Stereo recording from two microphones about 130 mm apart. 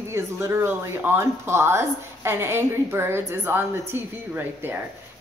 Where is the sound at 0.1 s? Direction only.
20° right (ahead or behind).